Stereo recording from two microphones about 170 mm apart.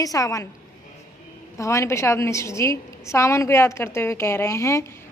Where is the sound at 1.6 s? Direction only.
15° left (ahead or behind).